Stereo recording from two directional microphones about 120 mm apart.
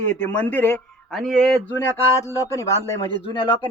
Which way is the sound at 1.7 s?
25° left (ahead or behind).